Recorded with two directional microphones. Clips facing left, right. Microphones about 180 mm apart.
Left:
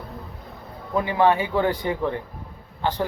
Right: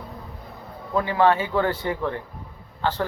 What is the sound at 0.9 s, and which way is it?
Speech, 15° left (ahead or behind).